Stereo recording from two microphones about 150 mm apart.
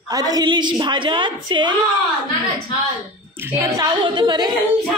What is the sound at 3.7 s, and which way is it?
Singing, 30° right (ahead or behind).